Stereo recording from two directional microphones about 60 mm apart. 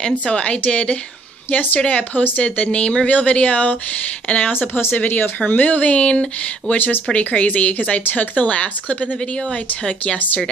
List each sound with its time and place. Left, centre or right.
0.0 s speech: centre